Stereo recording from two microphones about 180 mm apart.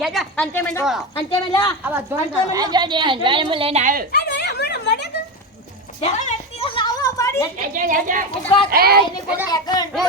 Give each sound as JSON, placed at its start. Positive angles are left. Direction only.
{"t": 0.0, "sound": "a woman's voice", "side_deg": 0}
{"t": 0.5, "sound": "speech", "side_deg": 10}
{"t": 1.3, "sound": "speech", "side_deg": 25}
{"t": 1.8, "sound": "speech", "side_deg": -10}
{"t": 4.1, "sound": "a sound", "side_deg": 70}
{"t": 6.0, "sound": "a sound", "side_deg": 35}
{"t": 7.8, "sound": "speech", "side_deg": -45}
{"t": 8.4, "sound": "speech", "side_deg": 30}
{"t": 8.7, "sound": "speech", "side_deg": -60}
{"t": 9.2, "sound": "speech", "side_deg": -10}
{"t": 9.5, "sound": "speech", "side_deg": 20}